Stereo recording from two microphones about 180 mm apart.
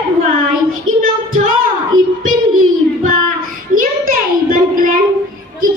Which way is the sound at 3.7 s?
50° right (ahead or behind).